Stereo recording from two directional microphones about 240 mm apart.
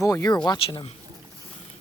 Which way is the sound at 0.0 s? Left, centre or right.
Centre.